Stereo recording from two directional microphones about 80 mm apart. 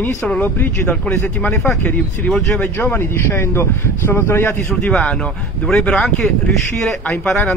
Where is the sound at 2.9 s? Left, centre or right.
Left.